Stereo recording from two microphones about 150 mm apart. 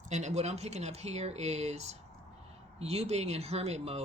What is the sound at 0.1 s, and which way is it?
Speech, 50° right (ahead or behind).